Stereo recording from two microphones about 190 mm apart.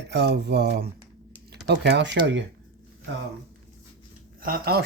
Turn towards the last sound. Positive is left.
turn(degrees=-50)  # may be behind; listen again after turning